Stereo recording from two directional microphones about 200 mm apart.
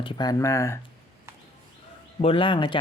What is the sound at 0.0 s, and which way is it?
Speech, 25° left (ahead or behind).